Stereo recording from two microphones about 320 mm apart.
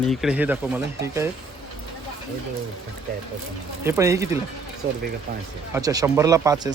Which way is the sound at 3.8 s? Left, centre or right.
Centre.